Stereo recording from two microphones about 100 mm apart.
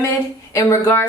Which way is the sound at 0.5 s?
30° left (ahead or behind).